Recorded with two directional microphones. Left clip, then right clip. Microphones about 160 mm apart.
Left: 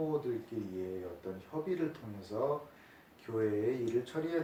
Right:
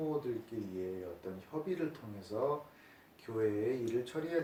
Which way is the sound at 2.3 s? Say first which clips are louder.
Left 1 dB; 25° right (ahead or behind).